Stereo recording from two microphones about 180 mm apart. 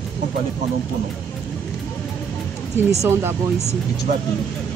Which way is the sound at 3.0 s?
15° right (ahead or behind).